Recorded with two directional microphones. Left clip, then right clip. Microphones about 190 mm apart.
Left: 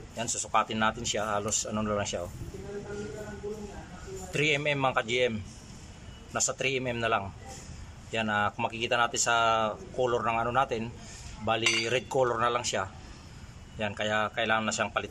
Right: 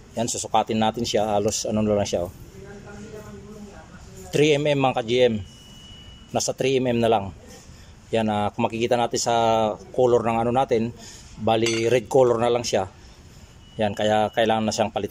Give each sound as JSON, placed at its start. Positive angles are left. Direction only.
{"t": 0.1, "sound": "speech", "side_deg": -25}
{"t": 4.3, "sound": "speech", "side_deg": -25}